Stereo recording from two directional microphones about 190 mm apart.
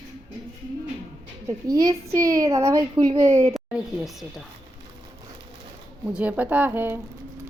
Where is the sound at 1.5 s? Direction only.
20° right (ahead or behind).